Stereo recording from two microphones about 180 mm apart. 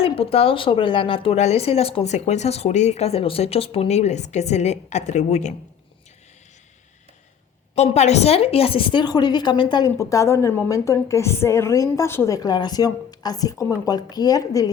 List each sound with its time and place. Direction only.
0.0 s speech: 30° left (ahead or behind)
7.8 s a woman's voice: 35° left (ahead or behind); by 14.7 s 20° left (ahead or behind)